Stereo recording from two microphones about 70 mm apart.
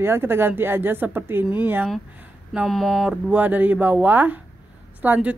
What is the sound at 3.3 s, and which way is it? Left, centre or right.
A woman's voice, right.